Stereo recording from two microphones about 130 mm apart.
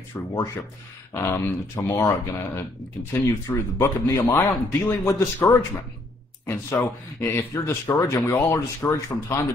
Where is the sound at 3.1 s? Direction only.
20° left (ahead or behind).